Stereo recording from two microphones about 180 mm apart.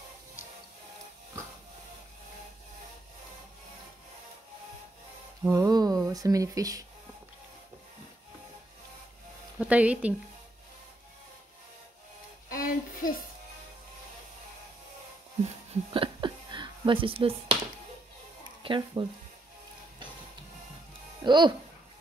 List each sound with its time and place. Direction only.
5.4 s a sound: 20° right (ahead or behind)
9.6 s speech: 5° right (ahead or behind)
12.4 s music: 50° left (ahead or behind)
15.9 s a sound: 30° right (ahead or behind)
18.6 s speech: 30° right (ahead or behind)
21.2 s speech: 25° right (ahead or behind)